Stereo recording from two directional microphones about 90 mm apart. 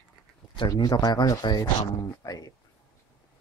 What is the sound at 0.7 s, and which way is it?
Speech, 45° left (ahead or behind).